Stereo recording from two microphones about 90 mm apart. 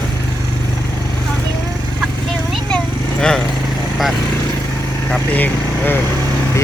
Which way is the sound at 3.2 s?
5° left (ahead or behind).